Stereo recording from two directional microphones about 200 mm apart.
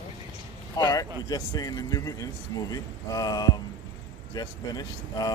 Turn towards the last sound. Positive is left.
turn(degrees=20)  # may be behind; listen again after turning